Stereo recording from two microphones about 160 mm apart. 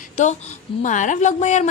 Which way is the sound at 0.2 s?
50° left (ahead or behind).